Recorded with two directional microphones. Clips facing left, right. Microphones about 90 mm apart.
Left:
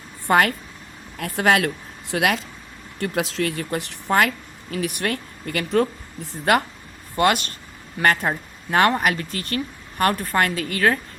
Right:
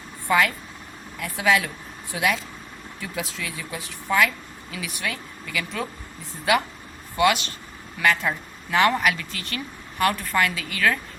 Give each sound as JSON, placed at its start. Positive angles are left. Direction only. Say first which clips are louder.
{"t": 0.3, "sound": "a woman's voice", "louder": "left 3 dB", "side_deg": 60}
{"t": 7.2, "sound": "a woman's voice", "louder": "left 1 dB", "side_deg": 45}